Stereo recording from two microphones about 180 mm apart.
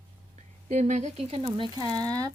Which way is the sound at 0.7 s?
40° right (ahead or behind).